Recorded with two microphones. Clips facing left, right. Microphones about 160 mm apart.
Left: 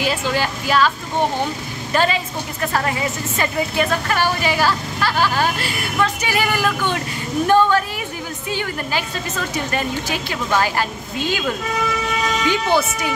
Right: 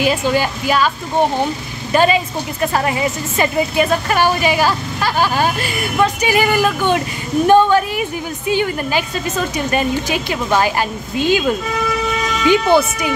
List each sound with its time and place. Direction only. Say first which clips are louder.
0.0 s a woman's voice: right 5 dB; 15° right (ahead or behind)
12.4 s a woman's voice: right 8 dB; 15° right (ahead or behind)